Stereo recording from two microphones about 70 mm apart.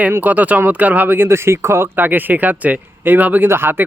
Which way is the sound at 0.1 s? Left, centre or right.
Right.